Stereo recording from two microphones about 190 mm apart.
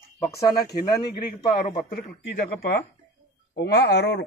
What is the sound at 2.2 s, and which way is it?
Speech, 55° left (ahead or behind).